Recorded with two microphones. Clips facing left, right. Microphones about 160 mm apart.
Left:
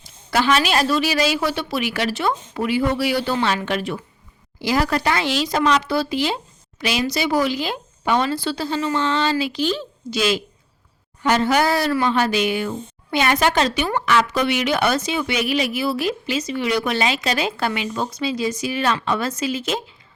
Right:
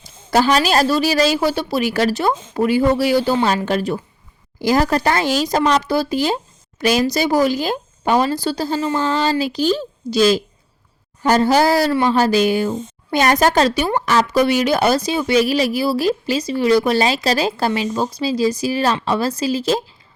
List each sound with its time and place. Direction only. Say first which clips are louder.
0.3 s speech: right 3 dB; 40° right (ahead or behind)